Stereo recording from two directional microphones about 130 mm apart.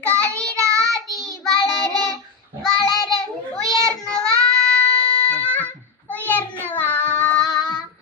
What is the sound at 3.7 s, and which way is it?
Child singing, 5° left (ahead or behind).